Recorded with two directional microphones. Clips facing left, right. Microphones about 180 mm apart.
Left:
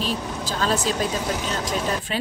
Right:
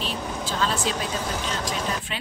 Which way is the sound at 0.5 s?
40° left (ahead or behind).